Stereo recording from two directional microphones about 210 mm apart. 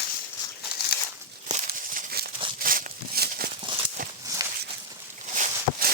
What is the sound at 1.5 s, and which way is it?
Crumpling, 40° right (ahead or behind).